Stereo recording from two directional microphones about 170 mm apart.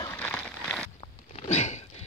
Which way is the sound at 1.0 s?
40° left (ahead or behind).